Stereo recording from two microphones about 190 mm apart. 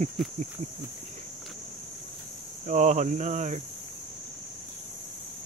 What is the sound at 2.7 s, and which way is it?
Speech, 40° right (ahead or behind).